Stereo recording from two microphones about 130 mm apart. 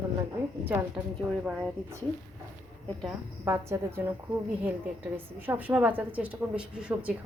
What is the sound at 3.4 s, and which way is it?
Speech, 20° right (ahead or behind).